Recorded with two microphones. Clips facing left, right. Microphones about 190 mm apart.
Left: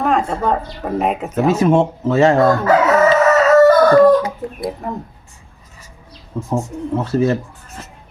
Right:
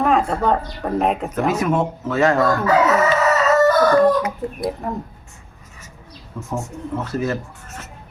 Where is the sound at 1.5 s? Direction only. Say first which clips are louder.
Left 6 dB; 25° left (ahead or behind).